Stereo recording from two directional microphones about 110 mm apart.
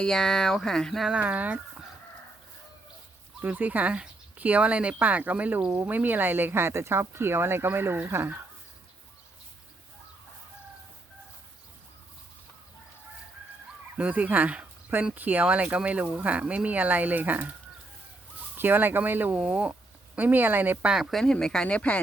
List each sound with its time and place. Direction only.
0.0 s speech: 5° left (ahead or behind); by 1.5 s 15° right (ahead or behind)
3.4 s speech: 15° right (ahead or behind)
14.0 s speech: 15° right (ahead or behind)
18.5 s speech: 20° right (ahead or behind)
20.9 s speech: centre (ahead or behind)